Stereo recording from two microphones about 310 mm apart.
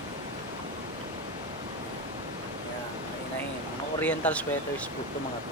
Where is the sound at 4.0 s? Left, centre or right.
Centre.